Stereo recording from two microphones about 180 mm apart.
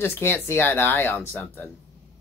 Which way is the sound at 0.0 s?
15° left (ahead or behind).